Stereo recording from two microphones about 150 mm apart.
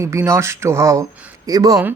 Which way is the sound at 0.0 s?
20° right (ahead or behind).